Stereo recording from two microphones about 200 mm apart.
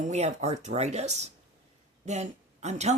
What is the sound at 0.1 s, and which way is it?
A woman's voice, 35° right (ahead or behind).